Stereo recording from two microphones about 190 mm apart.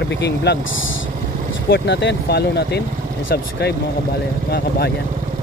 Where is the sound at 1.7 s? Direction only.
65° left (ahead or behind).